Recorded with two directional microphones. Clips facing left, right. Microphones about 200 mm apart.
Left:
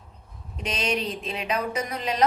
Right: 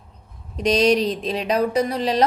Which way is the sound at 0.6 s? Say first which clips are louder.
Right 11 dB; 35° right (ahead or behind).